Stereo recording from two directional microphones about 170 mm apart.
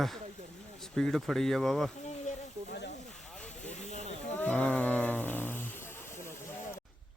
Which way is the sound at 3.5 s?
45° left (ahead or behind).